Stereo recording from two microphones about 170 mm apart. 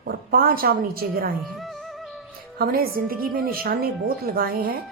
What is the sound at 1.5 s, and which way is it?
Music, centre (ahead or behind).